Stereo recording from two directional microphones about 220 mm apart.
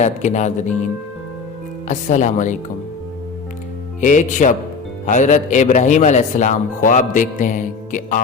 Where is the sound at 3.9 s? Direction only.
35° left (ahead or behind).